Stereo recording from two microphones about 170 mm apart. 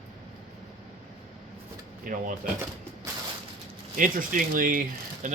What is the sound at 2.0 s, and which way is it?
Speech, 55° right (ahead or behind).